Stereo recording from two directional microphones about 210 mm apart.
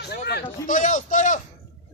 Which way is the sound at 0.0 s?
50° left (ahead or behind).